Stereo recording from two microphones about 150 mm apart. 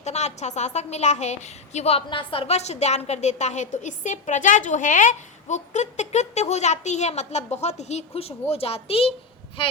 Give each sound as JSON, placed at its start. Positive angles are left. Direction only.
{"t": 0.0, "sound": "a woman's voice", "side_deg": 50}